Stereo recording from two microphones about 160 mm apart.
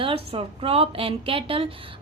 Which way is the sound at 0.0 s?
35° right (ahead or behind).